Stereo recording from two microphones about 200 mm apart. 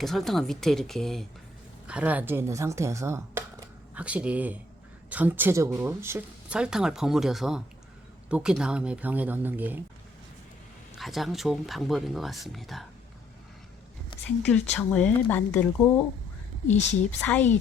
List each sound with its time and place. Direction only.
0.0 s speech: centre (ahead or behind)
10.9 s speech: centre (ahead or behind)
14.3 s speech: 5° left (ahead or behind)
16.7 s speech: 35° left (ahead or behind)
17.2 s speech: 10° left (ahead or behind)